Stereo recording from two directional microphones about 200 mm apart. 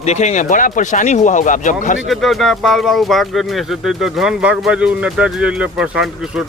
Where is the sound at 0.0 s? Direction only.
35° left (ahead or behind).